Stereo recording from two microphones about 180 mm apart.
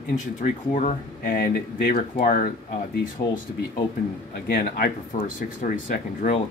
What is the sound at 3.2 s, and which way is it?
Speech, 60° left (ahead or behind).